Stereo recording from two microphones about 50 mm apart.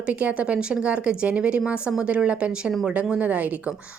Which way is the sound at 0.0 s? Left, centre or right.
Right.